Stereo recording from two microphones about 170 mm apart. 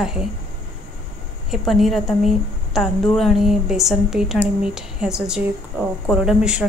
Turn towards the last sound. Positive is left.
turn(degrees=-5)  # may be behind; listen again after turning